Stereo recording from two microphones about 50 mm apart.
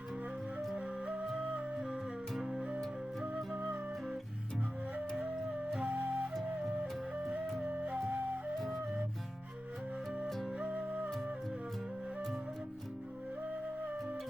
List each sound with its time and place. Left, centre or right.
0.8 s music: right
2.3 s music: centre
2.6 s music: right
5.7 s flute: right
7.1 s music: right
7.6 s flute: right
8.5 s flute: centre
10.2 s music: centre
10.5 s music: right